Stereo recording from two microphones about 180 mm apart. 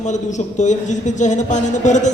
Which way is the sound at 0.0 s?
40° left (ahead or behind).